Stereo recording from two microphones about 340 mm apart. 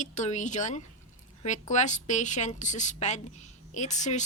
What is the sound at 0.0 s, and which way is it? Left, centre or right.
Speech, left.